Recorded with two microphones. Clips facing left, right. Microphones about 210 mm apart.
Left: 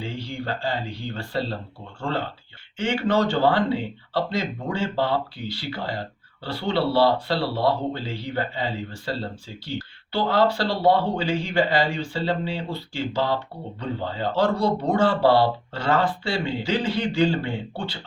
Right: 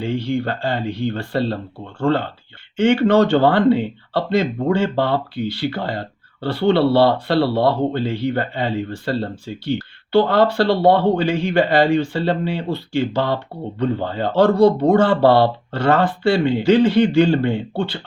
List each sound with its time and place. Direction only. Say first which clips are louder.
0.0 s speech: right 10 dB; 60° right (ahead or behind)